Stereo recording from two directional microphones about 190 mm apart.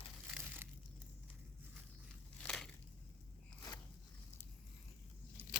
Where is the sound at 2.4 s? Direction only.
Centre (ahead or behind).